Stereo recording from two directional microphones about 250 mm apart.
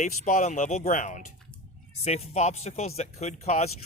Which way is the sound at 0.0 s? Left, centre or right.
Left.